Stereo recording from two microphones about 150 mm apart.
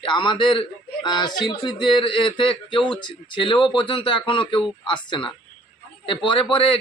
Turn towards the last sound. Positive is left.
turn(degrees=35)  # may be behind; listen again after turning